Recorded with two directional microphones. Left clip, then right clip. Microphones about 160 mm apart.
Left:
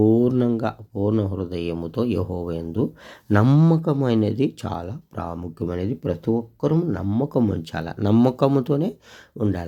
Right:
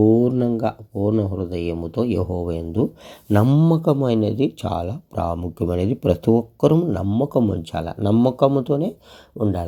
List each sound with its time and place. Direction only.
0.0 s speech: centre (ahead or behind)
3.2 s speech: 10° left (ahead or behind)
4.2 s speech: 45° left (ahead or behind)
4.6 s speech: 5° right (ahead or behind)
6.7 s speech: centre (ahead or behind)